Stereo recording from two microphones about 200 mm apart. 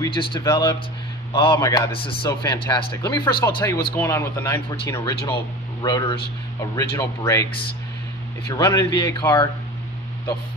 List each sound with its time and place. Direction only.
0.0 s a man's voice: 25° left (ahead or behind)
8.5 s speech: 15° left (ahead or behind)